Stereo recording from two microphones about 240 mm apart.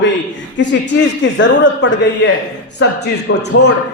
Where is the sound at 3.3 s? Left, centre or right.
Left.